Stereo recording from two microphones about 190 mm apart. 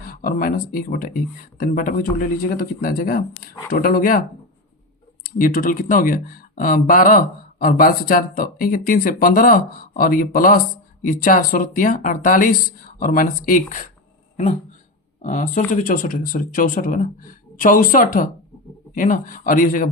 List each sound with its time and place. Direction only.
0.0 s speech: 45° left (ahead or behind)
5.2 s speech: 45° left (ahead or behind)
15.2 s speech: 40° left (ahead or behind)